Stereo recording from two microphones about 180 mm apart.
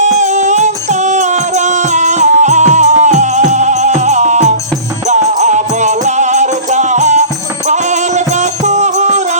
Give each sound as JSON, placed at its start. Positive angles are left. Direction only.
{"t": 0.0, "sound": "music", "side_deg": -40}